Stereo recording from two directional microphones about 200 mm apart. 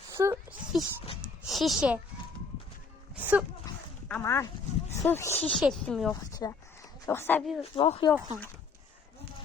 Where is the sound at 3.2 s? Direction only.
10° right (ahead or behind).